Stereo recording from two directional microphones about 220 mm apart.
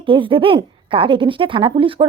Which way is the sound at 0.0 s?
20° right (ahead or behind).